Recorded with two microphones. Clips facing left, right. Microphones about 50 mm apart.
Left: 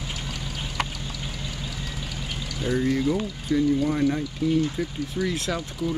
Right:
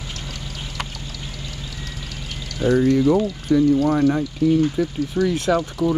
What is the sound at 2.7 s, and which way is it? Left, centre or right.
Speech, right.